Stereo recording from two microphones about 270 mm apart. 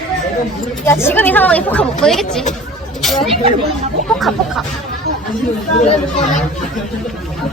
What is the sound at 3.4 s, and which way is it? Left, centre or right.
Speech, right.